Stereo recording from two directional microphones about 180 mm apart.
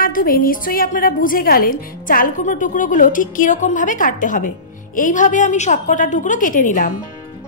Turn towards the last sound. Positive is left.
turn(degrees=45)  # may be behind; listen again after turning